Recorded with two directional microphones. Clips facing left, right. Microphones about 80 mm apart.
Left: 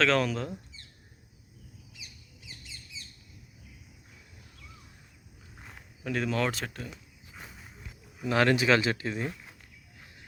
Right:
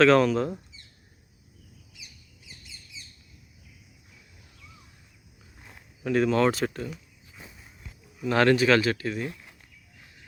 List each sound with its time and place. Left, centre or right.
0.0 s speech: centre
6.0 s speech: centre
8.3 s speech: centre